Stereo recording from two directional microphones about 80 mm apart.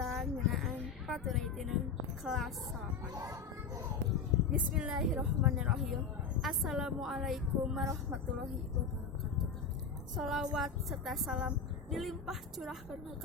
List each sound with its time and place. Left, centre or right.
0.0 s a sound: centre
2.3 s a woman's voice: centre
3.1 s speech: right
4.5 s a woman's voice: centre
10.2 s a woman's voice: centre